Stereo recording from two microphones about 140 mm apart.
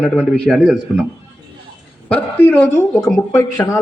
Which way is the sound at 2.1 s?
10° left (ahead or behind).